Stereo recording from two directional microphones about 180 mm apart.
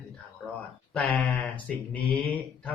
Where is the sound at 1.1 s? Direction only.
10° left (ahead or behind).